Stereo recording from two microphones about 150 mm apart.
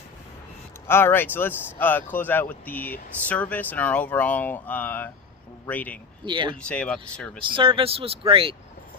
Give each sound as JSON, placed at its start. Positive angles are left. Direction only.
{"t": 0.9, "sound": "speech", "side_deg": 15}
{"t": 6.2, "sound": "speech", "side_deg": -30}
{"t": 6.6, "sound": "speech", "side_deg": 5}
{"t": 7.4, "sound": "speech", "side_deg": -35}